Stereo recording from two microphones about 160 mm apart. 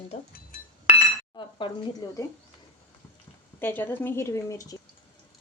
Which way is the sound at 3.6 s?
10° left (ahead or behind).